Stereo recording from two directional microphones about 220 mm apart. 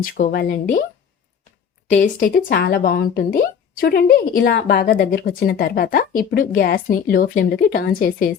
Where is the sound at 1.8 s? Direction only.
35° left (ahead or behind).